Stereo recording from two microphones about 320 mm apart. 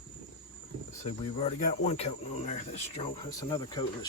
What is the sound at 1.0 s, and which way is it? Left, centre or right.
Speech, centre.